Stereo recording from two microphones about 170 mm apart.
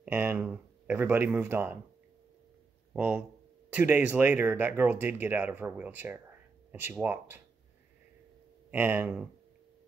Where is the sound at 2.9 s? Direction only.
10° right (ahead or behind).